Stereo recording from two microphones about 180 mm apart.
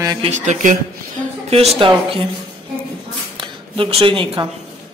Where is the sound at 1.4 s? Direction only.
30° right (ahead or behind).